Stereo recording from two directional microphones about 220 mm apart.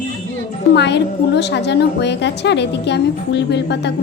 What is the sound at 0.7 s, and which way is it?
A woman's voice, 50° left (ahead or behind).